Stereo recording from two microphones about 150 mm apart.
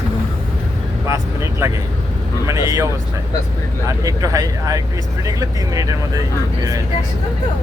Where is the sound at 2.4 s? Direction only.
20° right (ahead or behind).